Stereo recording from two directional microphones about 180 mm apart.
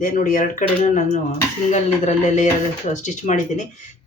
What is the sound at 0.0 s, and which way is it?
Speech, 50° left (ahead or behind).